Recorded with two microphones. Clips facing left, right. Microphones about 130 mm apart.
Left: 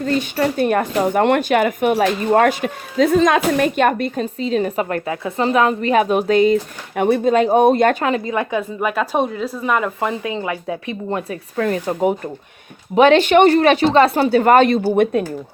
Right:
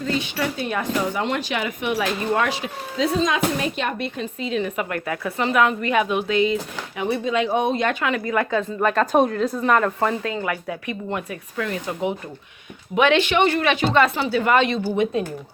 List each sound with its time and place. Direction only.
0.0 s speech: 45° left (ahead or behind)
8.2 s speech: 20° left (ahead or behind); by 14.8 s 45° left (ahead or behind)